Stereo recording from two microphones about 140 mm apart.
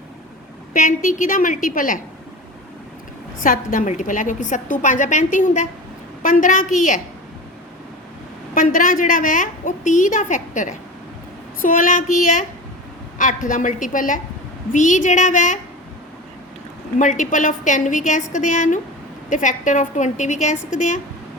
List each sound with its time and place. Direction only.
0.7 s a woman's voice: 70° left (ahead or behind)
3.4 s a woman's voice: 75° left (ahead or behind)
8.5 s a woman's voice: 75° left (ahead or behind)
11.6 s a woman's voice: 75° left (ahead or behind)
17.0 s a woman's voice: 65° left (ahead or behind)